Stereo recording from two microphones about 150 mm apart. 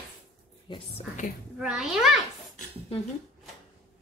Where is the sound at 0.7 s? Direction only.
30° left (ahead or behind).